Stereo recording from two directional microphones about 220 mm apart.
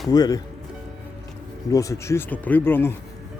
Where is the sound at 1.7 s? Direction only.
15° left (ahead or behind).